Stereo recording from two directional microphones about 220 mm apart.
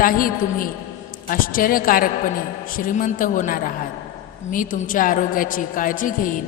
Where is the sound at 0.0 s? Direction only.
40° left (ahead or behind).